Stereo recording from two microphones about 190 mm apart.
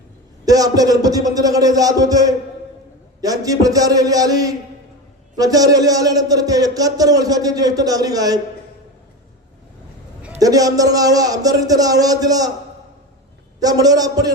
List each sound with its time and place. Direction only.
0.4 s speech: 20° right (ahead or behind)
10.4 s speech: 20° right (ahead or behind)
13.6 s speech: 20° right (ahead or behind)